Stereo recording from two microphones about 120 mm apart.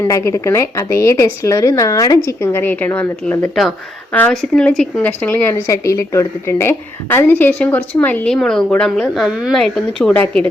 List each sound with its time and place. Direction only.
0.0 s speech: 25° left (ahead or behind); by 9.2 s 5° left (ahead or behind)
9.2 s a woman's voice: 5° right (ahead or behind); by 10.5 s 10° left (ahead or behind)